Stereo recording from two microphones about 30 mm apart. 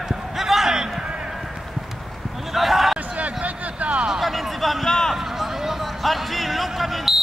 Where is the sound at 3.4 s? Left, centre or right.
Right.